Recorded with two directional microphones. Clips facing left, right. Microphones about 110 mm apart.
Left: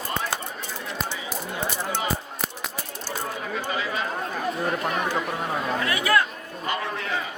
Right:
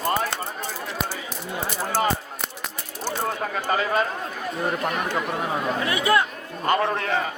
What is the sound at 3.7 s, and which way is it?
Speech, 50° right (ahead or behind).